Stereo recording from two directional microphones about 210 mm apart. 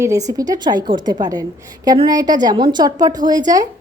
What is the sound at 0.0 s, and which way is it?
A woman's voice, 15° right (ahead or behind).